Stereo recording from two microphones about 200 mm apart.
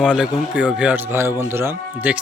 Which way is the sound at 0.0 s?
5° right (ahead or behind).